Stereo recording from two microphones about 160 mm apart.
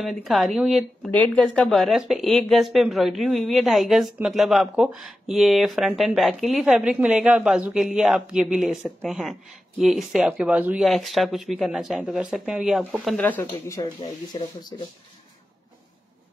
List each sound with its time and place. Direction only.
0.0 s speech: centre (ahead or behind)
13.2 s speech: 10° left (ahead or behind)
13.7 s speech: 25° left (ahead or behind)